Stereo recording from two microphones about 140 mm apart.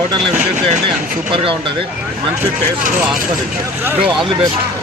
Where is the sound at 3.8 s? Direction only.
15° right (ahead or behind).